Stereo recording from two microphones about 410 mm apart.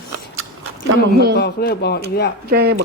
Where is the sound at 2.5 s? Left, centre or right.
Right.